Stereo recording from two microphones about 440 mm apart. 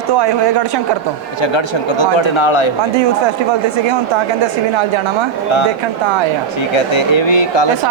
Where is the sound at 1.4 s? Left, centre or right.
Left.